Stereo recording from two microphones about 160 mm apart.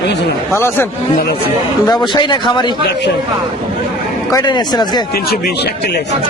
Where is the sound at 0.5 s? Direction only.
15° left (ahead or behind).